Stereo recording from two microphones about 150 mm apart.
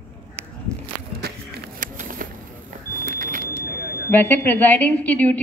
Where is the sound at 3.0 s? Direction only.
65° right (ahead or behind).